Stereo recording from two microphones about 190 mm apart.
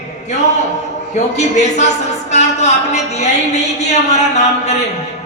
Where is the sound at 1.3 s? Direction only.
35° left (ahead or behind).